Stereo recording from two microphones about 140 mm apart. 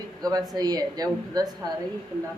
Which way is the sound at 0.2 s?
30° right (ahead or behind).